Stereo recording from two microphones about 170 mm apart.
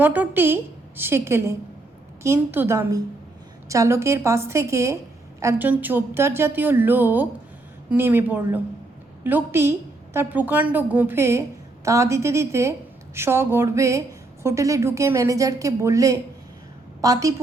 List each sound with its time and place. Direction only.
0.0 s a woman's voice: 10° right (ahead or behind)